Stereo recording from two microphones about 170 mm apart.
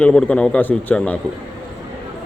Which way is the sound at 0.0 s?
5° left (ahead or behind).